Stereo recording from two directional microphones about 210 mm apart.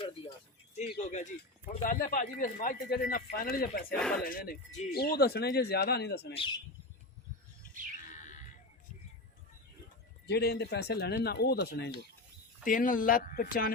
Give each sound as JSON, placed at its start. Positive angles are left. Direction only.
{"t": 0.0, "sound": "a sound", "side_deg": 25}
{"t": 0.9, "sound": "speech", "side_deg": 35}
{"t": 3.9, "sound": "speech", "side_deg": 5}
{"t": 4.2, "sound": "speech", "side_deg": 45}
{"t": 8.1, "sound": "a sound", "side_deg": 35}
{"t": 10.2, "sound": "speech", "side_deg": 50}